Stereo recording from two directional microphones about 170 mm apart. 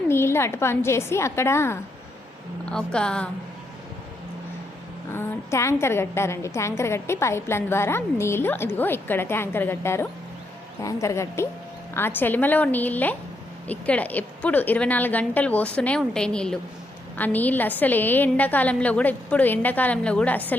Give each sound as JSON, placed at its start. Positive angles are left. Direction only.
{"t": 0.1, "sound": "a woman's voice", "side_deg": 15}
{"t": 5.1, "sound": "a woman's voice", "side_deg": 15}